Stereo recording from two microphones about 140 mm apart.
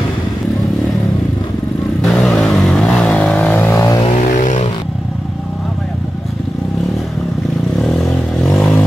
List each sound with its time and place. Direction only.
2.0 s vehicle: 5° left (ahead or behind); by 4.0 s 20° left (ahead or behind)
4.4 s vehicle: 65° left (ahead or behind)
7.8 s vehicle: 5° left (ahead or behind)